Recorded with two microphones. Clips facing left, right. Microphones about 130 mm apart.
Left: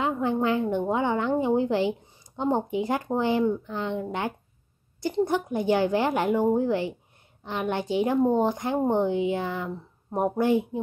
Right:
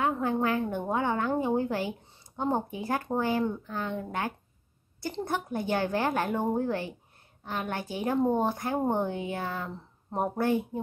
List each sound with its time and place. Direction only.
0.0 s a woman's voice: 20° left (ahead or behind)